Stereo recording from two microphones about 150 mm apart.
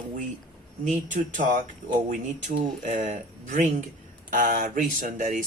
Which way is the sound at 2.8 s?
55° right (ahead or behind).